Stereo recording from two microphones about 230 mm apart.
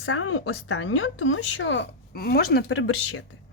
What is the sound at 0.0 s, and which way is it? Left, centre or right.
A woman's voice, left.